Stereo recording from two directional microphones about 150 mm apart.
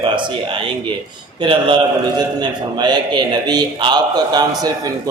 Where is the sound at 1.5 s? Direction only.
30° right (ahead or behind).